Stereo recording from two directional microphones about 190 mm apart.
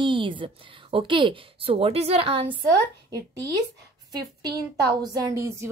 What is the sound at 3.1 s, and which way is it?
Speech, 15° right (ahead or behind).